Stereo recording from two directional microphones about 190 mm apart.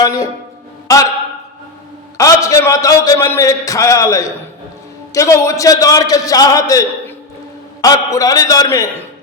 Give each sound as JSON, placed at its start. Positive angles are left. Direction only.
{"t": 0.0, "sound": "a man's voice", "side_deg": 20}
{"t": 2.1, "sound": "a man's voice", "side_deg": 15}